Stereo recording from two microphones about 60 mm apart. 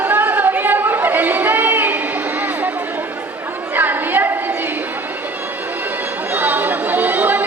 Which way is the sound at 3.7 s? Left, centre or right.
Right.